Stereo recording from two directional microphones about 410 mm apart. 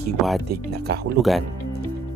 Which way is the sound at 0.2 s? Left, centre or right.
Centre.